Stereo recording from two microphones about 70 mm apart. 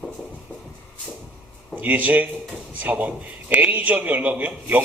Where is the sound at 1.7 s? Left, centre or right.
Right.